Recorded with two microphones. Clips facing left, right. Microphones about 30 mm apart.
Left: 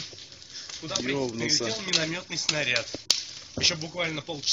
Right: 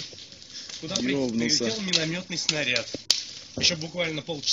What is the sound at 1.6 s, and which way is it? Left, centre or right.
Speech, centre.